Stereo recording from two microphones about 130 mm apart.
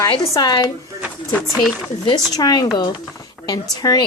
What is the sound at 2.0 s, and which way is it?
A woman's voice, 30° left (ahead or behind).